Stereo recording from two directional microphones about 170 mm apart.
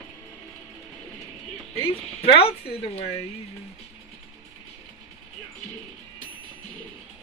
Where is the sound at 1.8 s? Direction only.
35° left (ahead or behind).